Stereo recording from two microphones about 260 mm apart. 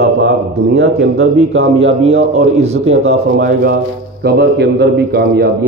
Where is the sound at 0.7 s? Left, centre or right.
Right.